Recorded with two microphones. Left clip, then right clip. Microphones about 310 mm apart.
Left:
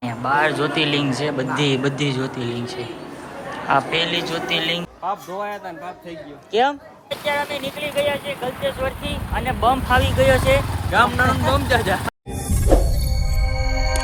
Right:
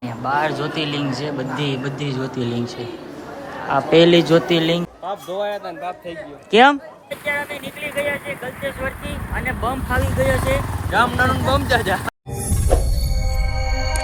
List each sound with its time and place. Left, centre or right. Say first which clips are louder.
0.0 s speech: left 2 dB; centre
3.7 s a man's voice: right 4 dB; centre
4.0 s a man's voice: right 9 dB; right
6.5 s a man's voice: right 6 dB; right
7.3 s speech: left 2 dB; centre
10.6 s speech: left 1 dB; centre
12.7 s music: left 3 dB; centre